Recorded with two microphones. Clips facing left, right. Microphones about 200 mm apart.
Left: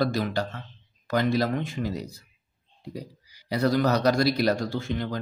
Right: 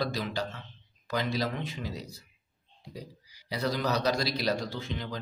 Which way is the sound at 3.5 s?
50° left (ahead or behind).